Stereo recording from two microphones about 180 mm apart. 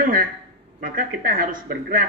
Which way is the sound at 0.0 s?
50° right (ahead or behind).